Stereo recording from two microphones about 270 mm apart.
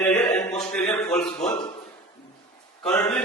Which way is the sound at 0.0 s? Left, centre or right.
Centre.